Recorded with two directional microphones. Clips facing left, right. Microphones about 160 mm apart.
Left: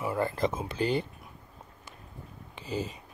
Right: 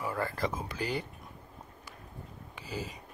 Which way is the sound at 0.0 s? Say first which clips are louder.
Left 4 dB; 20° left (ahead or behind).